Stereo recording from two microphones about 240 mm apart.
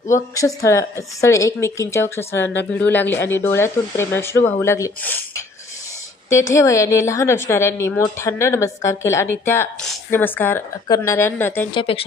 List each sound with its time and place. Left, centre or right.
0.1 s a woman's voice: centre
6.5 s a woman's voice: centre
11.7 s speech: left